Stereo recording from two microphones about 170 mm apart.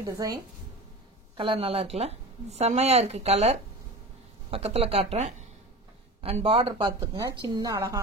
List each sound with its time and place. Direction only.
0.0 s a woman's voice: 20° right (ahead or behind)
1.3 s a woman's voice: 30° right (ahead or behind)